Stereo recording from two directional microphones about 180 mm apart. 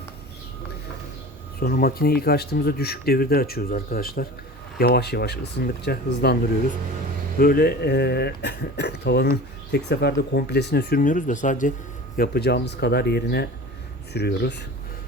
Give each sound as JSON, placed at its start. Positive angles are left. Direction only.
{"t": 1.5, "sound": "speech", "side_deg": 55}
{"t": 7.3, "sound": "speech", "side_deg": 55}
{"t": 12.1, "sound": "speech", "side_deg": 60}